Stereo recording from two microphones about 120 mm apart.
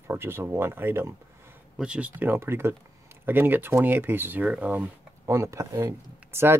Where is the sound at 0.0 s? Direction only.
20° right (ahead or behind).